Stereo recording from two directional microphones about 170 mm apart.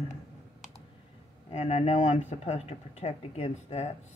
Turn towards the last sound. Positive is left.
turn(degrees=40)  # may be behind; listen again after turning